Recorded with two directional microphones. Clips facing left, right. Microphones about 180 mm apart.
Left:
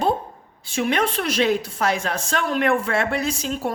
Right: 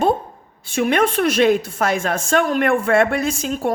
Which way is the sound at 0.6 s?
50° right (ahead or behind).